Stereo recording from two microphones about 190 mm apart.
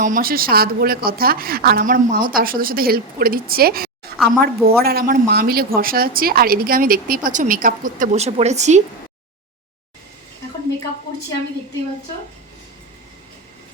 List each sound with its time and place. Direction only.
0.0 s speech: 45° right (ahead or behind)